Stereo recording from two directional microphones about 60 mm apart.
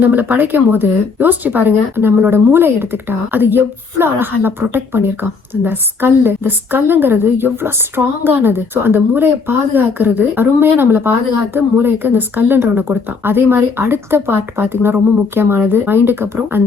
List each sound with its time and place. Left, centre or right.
0.0 s speech: right